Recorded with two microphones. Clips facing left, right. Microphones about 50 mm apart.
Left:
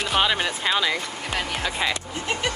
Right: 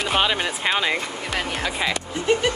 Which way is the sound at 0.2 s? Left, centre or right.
Centre.